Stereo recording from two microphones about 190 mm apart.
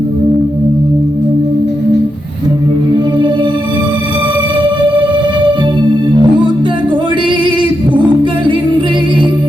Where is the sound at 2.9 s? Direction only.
25° right (ahead or behind).